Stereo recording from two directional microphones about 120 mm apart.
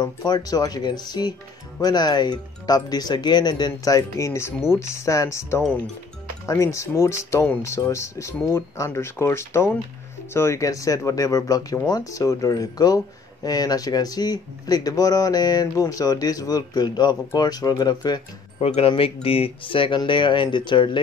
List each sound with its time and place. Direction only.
0.0 s speech: 35° left (ahead or behind)
18.6 s speech: 55° left (ahead or behind)